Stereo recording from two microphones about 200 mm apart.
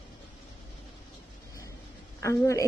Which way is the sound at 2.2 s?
15° left (ahead or behind).